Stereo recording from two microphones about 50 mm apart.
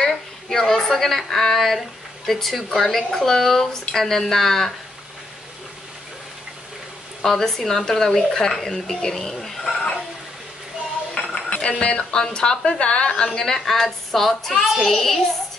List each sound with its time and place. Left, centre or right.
0.0 s a woman's voice: centre
7.2 s a woman's voice: centre
11.1 s dishes: left
12.2 s a woman's voice: centre